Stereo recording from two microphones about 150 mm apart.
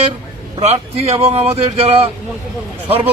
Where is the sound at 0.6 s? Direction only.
45° right (ahead or behind).